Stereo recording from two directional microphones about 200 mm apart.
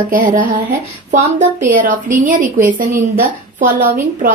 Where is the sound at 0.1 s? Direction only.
40° right (ahead or behind).